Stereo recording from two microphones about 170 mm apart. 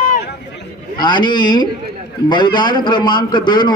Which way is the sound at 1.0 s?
25° left (ahead or behind).